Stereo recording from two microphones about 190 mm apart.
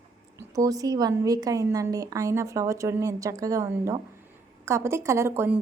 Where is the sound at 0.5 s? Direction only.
20° right (ahead or behind).